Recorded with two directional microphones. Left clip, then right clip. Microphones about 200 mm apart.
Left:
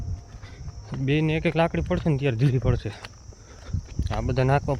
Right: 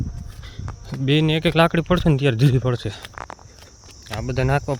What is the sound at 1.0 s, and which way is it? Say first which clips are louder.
Speech: right 5 dB; 20° right (ahead or behind).